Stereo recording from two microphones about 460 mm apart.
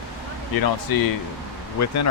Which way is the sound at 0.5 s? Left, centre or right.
Left.